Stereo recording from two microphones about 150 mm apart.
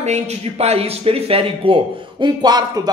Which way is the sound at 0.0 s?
45° right (ahead or behind).